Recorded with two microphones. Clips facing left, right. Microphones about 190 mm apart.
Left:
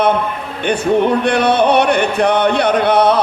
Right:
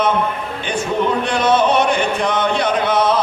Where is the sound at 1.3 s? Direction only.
60° left (ahead or behind).